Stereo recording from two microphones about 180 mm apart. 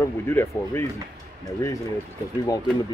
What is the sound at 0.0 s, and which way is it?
Speech, 15° left (ahead or behind).